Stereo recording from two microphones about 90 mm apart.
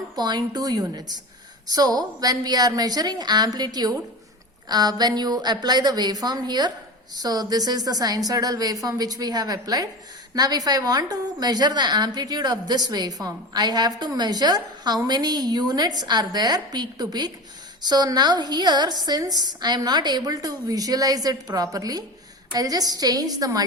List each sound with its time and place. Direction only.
0.2 s a woman's voice: 50° right (ahead or behind)